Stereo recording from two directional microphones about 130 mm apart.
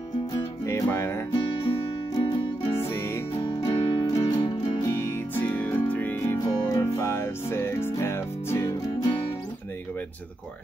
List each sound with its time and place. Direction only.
0.7 s music: 20° left (ahead or behind)
2.1 s music: 35° left (ahead or behind)
2.8 s music: 20° left (ahead or behind)
3.4 s music: 35° left (ahead or behind)
4.8 s music: 20° left (ahead or behind)